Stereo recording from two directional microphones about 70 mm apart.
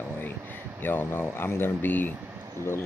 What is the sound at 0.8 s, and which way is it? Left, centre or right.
Speech, left.